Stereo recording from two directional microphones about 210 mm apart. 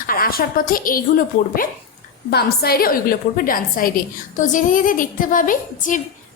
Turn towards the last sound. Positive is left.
turn(degrees=40)  # may be behind; listen again after turning